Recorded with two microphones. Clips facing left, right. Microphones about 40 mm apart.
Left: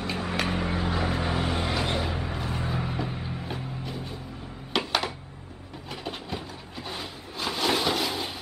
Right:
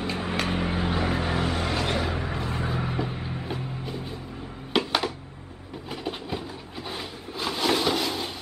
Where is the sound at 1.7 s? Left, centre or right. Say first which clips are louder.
Right 1 dB; centre.